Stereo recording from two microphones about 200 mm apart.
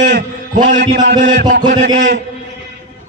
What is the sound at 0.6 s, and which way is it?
Mantra, 35° right (ahead or behind).